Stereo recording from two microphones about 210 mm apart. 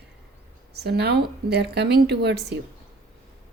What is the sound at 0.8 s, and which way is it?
Speech, 50° right (ahead or behind).